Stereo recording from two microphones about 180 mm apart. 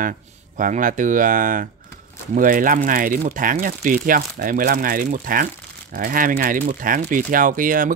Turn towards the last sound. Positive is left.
turn(degrees=-50)  # may be behind; listen again after turning